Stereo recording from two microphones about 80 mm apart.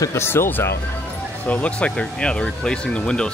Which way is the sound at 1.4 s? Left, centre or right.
Centre.